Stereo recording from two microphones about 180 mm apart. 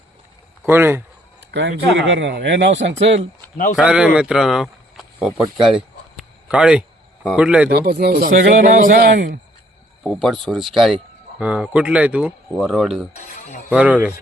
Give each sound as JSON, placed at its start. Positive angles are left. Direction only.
{"t": 0.6, "sound": "a sound", "side_deg": -10}
{"t": 1.5, "sound": "speech", "side_deg": -70}
{"t": 3.8, "sound": "speech", "side_deg": -5}
{"t": 5.6, "sound": "a sound", "side_deg": -5}
{"t": 7.7, "sound": "a man's voice", "side_deg": -60}
{"t": 10.0, "sound": "speech", "side_deg": 0}
{"t": 13.1, "sound": "speech", "side_deg": 40}
{"t": 13.7, "sound": "speech", "side_deg": -10}